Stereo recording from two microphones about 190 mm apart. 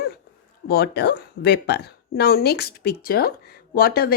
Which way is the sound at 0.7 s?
55° left (ahead or behind).